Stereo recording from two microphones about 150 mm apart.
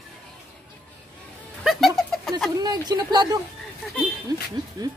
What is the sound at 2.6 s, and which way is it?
Speech, 25° right (ahead or behind).